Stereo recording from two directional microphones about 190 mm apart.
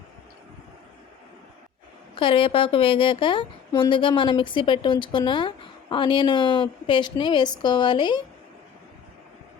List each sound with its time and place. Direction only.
2.1 s a woman's voice: 25° left (ahead or behind)